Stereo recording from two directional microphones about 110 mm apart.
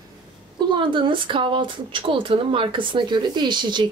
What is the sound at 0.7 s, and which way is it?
Speech, 50° right (ahead or behind).